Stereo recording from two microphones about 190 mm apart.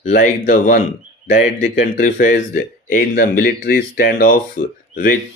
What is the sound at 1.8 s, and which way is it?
Speech, 50° left (ahead or behind).